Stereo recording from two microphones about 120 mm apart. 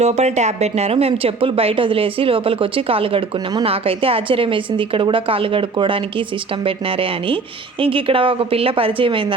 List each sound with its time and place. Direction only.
0.0 s a woman's voice: 65° right (ahead or behind); by 9.2 s 45° right (ahead or behind)